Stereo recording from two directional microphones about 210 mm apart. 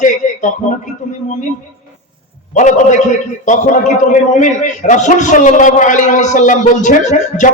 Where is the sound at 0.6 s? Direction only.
35° left (ahead or behind).